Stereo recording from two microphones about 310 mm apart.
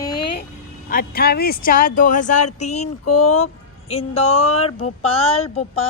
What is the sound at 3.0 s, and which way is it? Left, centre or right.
Speech, left.